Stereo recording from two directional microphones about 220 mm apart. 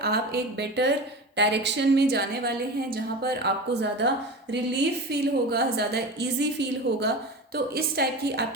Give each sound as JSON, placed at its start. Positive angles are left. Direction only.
{"t": 0.0, "sound": "a woman's voice", "side_deg": -45}